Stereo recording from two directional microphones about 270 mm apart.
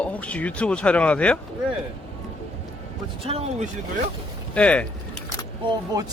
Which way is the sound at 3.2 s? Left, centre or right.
Right.